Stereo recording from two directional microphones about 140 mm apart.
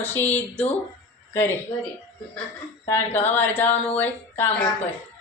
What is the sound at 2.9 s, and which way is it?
A woman's voice, 15° left (ahead or behind).